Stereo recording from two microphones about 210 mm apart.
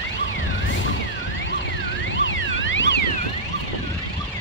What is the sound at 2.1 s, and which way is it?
Car alarm, 65° left (ahead or behind).